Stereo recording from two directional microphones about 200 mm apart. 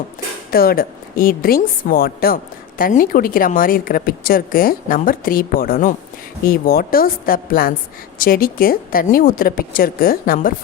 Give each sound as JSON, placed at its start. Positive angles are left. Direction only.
{"t": 0.5, "sound": "a woman's voice", "side_deg": 50}